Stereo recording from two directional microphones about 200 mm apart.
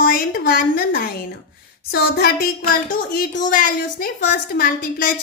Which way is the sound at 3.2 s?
40° left (ahead or behind).